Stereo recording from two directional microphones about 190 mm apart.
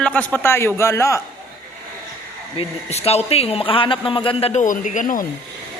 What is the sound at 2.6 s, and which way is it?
Speech, 35° left (ahead or behind).